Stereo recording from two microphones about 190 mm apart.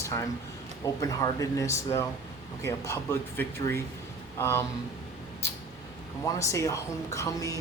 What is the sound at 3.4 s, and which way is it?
Speech, 15° left (ahead or behind).